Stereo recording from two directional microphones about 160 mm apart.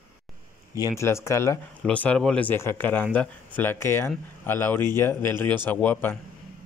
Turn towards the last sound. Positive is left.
turn(degrees=10)  # may be behind; listen again after turning